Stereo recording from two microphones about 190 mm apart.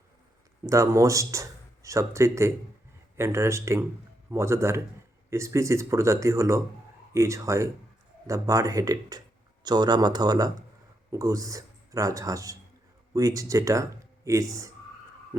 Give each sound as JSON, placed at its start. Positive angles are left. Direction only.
{"t": 0.6, "sound": "speech", "side_deg": -15}